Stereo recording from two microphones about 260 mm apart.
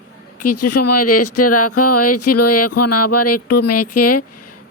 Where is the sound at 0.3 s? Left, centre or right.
Left.